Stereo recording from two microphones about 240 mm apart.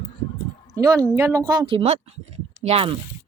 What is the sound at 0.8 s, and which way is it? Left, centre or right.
A woman's voice, centre.